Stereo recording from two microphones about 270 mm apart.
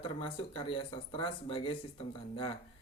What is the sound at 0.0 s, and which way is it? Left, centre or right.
Speech, centre.